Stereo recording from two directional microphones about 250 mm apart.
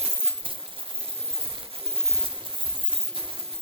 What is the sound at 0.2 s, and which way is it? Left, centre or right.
Coin, right.